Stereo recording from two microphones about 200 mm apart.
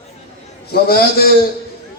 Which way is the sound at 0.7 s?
50° left (ahead or behind).